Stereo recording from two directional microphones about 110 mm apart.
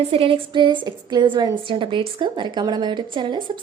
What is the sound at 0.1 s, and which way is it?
A woman's voice, 55° right (ahead or behind).